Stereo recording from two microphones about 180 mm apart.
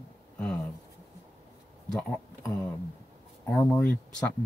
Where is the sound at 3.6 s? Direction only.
5° left (ahead or behind).